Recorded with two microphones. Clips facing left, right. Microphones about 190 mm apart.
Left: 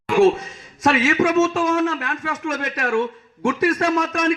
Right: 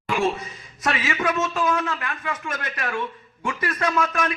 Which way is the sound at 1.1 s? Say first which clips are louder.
Left 7 dB; 40° left (ahead or behind).